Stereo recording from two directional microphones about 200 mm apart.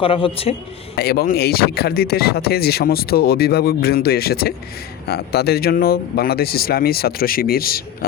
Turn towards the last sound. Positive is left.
turn(degrees=50)  # may be behind; listen again after turning